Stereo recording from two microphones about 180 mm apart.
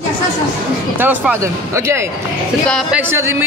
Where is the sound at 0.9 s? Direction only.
10° right (ahead or behind).